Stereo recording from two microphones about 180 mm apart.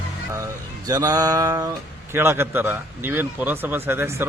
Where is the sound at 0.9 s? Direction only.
15° right (ahead or behind).